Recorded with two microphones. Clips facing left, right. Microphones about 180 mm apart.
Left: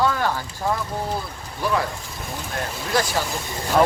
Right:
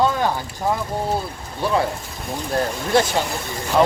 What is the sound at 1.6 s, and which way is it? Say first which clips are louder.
Speech: right 3 dB; 25° right (ahead or behind).